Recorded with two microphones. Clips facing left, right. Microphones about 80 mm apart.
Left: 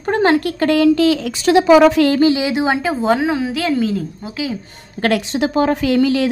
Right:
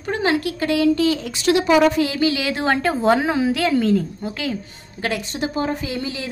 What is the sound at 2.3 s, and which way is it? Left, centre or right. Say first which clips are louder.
A woman's voice: left 4 dB; centre.